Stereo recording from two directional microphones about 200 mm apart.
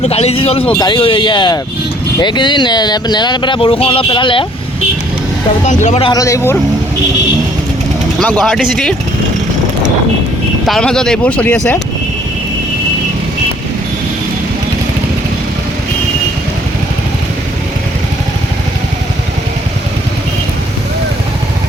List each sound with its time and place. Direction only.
0.0 s speech: 30° left (ahead or behind)
5.6 s speech: 35° left (ahead or behind)
6.1 s speech: 15° left (ahead or behind)
8.2 s speech: centre (ahead or behind)
10.7 s speech: 5° left (ahead or behind)